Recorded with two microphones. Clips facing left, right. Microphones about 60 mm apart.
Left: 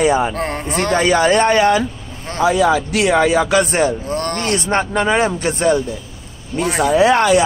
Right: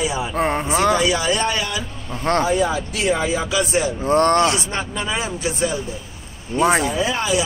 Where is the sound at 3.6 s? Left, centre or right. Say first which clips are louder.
Left 4 dB; left.